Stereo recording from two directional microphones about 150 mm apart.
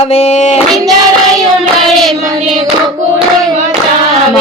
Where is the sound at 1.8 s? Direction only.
Centre (ahead or behind).